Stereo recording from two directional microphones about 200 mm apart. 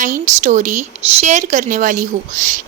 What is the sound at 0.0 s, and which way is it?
A woman's voice, 40° right (ahead or behind).